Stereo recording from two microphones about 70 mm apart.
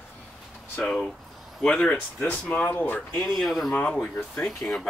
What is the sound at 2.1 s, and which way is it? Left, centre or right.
Speech, left.